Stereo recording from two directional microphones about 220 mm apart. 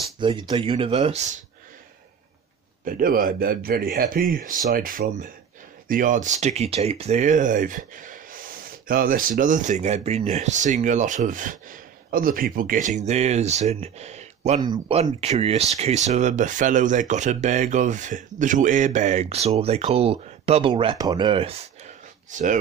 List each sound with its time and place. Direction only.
0.2 s speech: 25° right (ahead or behind)
2.8 s speech: 40° right (ahead or behind)